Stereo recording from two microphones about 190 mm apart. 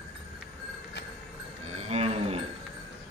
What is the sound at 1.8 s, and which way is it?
Cattle, 35° right (ahead or behind).